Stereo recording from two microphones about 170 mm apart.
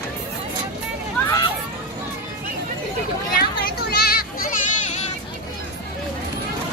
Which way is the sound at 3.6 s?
65° left (ahead or behind).